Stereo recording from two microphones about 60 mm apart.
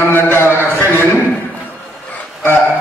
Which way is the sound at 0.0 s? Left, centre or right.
Left.